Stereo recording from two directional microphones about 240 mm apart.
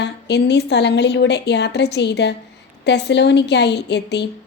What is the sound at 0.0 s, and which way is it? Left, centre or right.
A woman's voice, left.